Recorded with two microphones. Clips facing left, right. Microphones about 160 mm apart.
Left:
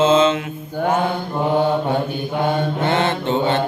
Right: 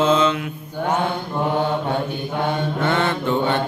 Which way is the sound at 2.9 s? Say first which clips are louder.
Left 1 dB; 20° left (ahead or behind).